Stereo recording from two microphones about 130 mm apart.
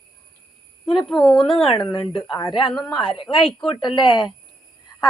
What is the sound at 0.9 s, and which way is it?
Speech, 5° left (ahead or behind).